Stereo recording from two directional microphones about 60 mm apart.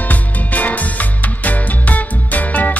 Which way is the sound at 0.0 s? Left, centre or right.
Left.